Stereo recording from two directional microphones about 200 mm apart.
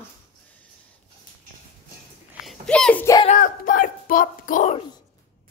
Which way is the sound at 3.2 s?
40° left (ahead or behind).